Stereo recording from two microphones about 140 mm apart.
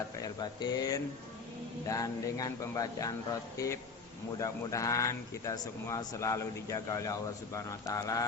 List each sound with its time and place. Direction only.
0.2 s speech: 30° left (ahead or behind)